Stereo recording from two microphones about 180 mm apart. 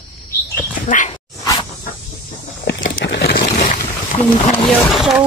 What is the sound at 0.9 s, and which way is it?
Dog, 45° left (ahead or behind).